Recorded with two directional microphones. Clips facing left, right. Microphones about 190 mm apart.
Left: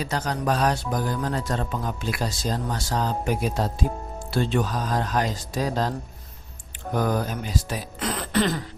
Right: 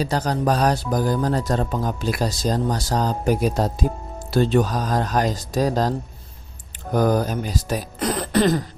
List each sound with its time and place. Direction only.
0.0 s speech: 35° right (ahead or behind)
6.9 s speech: 40° right (ahead or behind)